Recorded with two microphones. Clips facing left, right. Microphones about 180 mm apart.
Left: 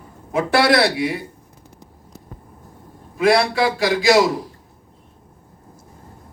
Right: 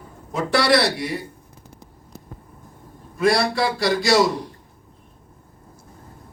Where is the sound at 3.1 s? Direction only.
90° left.